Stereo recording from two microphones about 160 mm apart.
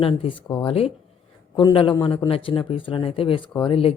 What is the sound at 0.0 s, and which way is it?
A man's voice, 35° left (ahead or behind).